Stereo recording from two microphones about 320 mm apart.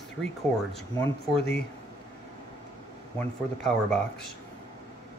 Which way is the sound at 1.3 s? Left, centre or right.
Left.